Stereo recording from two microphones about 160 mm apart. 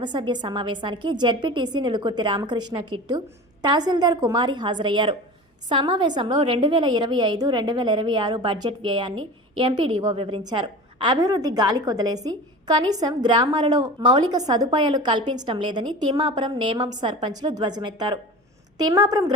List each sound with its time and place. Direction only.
0.0 s a woman's voice: 30° right (ahead or behind)